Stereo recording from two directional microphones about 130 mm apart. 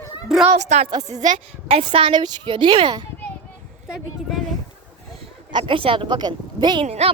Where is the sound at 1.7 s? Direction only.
45° right (ahead or behind).